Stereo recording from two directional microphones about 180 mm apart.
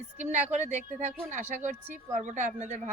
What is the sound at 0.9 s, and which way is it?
A man's voice, 40° right (ahead or behind).